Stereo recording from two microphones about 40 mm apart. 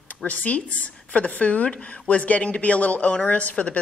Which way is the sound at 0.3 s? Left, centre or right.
Left.